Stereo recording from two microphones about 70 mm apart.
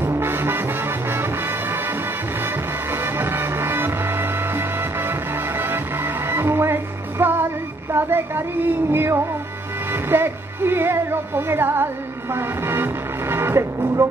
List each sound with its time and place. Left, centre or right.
0.0 s music: right
7.9 s a sound: right
8.9 s music: right